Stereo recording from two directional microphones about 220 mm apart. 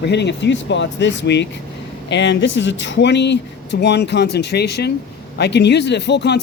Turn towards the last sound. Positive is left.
turn(degrees=50)  # may be behind; listen again after turning